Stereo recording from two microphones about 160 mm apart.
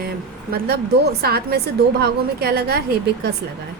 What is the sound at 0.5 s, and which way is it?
A woman's voice, 75° right (ahead or behind).